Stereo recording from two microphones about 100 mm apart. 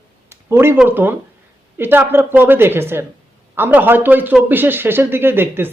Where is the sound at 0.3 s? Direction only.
25° right (ahead or behind).